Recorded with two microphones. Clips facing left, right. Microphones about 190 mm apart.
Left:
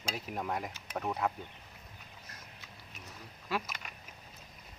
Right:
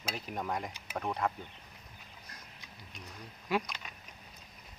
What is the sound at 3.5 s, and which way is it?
Speech, 15° right (ahead or behind).